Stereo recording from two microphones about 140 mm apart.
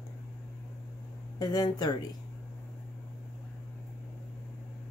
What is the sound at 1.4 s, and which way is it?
Speech, 30° left (ahead or behind).